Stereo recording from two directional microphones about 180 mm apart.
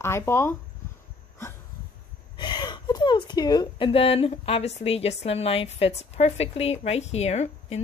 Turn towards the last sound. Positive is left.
turn(degrees=35)  # may be behind; listen again after turning